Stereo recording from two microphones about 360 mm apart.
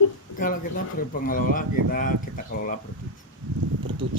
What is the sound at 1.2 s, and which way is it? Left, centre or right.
Speech, left.